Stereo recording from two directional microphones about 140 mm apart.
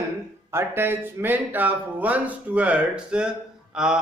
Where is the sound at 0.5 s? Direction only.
15° right (ahead or behind).